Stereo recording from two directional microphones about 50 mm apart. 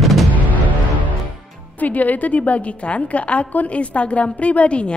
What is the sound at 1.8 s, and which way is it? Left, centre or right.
A woman's voice, left.